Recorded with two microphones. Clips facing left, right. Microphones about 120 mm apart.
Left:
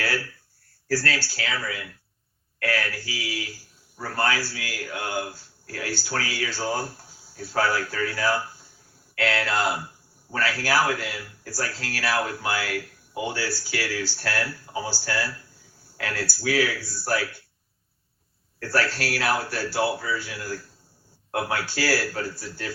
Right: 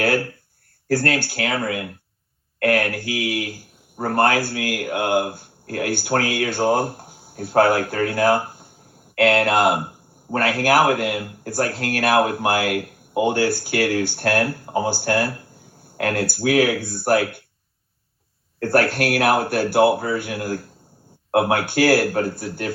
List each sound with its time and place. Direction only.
0.0 s speech: 55° right (ahead or behind)
18.6 s speech: 55° right (ahead or behind)